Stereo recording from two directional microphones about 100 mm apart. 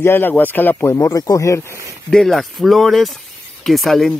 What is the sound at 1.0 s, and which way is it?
Speech, 35° left (ahead or behind).